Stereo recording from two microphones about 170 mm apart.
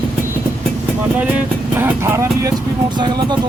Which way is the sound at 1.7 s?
10° right (ahead or behind).